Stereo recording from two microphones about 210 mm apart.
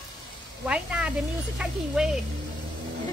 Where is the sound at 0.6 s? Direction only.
5° right (ahead or behind).